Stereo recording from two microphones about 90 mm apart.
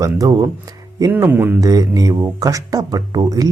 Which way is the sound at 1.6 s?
45° right (ahead or behind).